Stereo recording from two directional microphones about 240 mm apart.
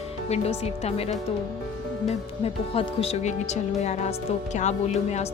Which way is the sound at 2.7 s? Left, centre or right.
Left.